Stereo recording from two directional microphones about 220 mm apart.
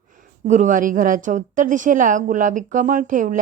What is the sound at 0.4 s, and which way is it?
A woman's voice, 35° right (ahead or behind).